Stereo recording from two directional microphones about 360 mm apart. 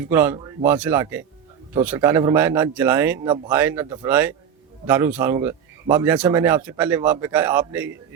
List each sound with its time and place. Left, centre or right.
0.1 s speech: centre